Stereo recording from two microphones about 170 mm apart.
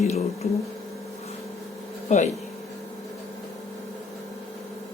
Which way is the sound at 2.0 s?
45° left (ahead or behind).